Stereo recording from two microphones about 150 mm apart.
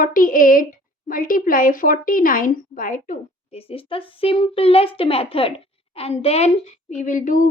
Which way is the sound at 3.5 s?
40° left (ahead or behind).